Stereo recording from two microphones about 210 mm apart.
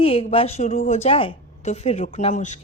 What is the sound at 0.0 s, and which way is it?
A woman's voice, 25° left (ahead or behind).